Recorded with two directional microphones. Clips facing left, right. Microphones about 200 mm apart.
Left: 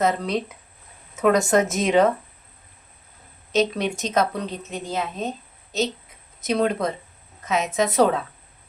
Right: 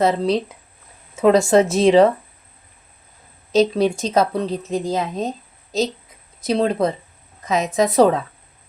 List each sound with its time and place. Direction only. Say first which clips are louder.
0.0 s a woman's voice: right 5 dB; 30° right (ahead or behind)
3.5 s a woman's voice: right 6 dB; 35° right (ahead or behind)
6.4 s a woman's voice: right 3 dB; 30° right (ahead or behind)